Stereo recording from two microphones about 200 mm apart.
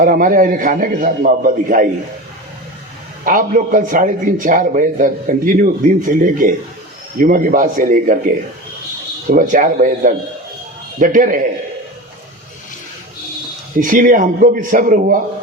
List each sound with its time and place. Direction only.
0.0 s a man's voice: 45° right (ahead or behind)
3.2 s a man's voice: 40° right (ahead or behind)
9.3 s a man's voice: 40° right (ahead or behind)
13.7 s a man's voice: 40° right (ahead or behind)